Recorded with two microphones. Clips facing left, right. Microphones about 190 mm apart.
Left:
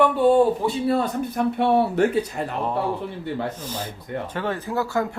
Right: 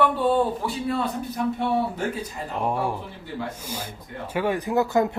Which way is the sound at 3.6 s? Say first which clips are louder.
Left 3 dB; 10° right (ahead or behind).